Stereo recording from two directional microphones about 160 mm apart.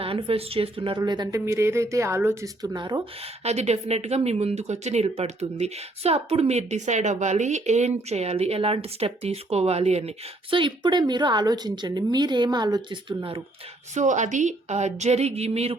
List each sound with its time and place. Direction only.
0.0 s speech: 35° right (ahead or behind)
3.4 s speech: 45° right (ahead or behind)
13.9 s a woman's voice: 50° right (ahead or behind)